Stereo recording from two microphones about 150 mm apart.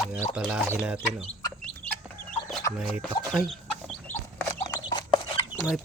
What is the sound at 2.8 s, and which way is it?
Speech, 5° right (ahead or behind).